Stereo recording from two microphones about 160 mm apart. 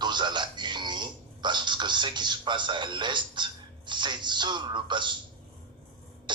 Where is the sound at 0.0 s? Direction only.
30° right (ahead or behind).